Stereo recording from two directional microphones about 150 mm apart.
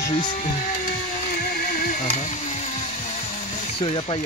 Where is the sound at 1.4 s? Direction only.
70° left (ahead or behind); by 2.7 s 45° left (ahead or behind).